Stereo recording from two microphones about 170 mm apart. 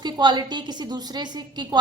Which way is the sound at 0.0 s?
25° right (ahead or behind).